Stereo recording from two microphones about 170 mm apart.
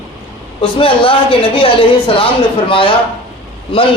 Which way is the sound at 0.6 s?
30° left (ahead or behind).